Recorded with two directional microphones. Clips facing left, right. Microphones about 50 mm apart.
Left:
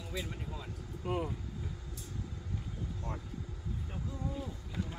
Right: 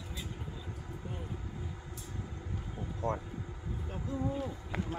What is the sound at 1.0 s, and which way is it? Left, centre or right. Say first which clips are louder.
Vehicle: left 11 dB; left.